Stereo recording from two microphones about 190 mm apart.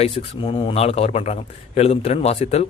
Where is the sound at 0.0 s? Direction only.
30° left (ahead or behind).